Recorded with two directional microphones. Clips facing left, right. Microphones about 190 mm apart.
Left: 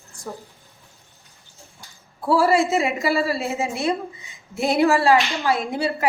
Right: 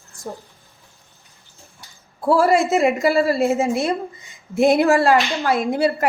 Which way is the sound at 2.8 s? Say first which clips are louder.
Right 5 dB; 55° right (ahead or behind).